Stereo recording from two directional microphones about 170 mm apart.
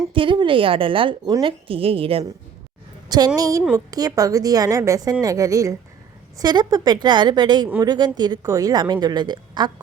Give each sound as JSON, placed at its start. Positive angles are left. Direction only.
{"t": 0.1, "sound": "a woman's voice", "side_deg": -30}
{"t": 3.1, "sound": "a woman's voice", "side_deg": -25}